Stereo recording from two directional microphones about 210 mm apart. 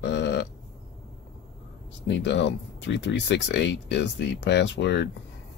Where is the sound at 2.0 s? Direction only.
60° left (ahead or behind).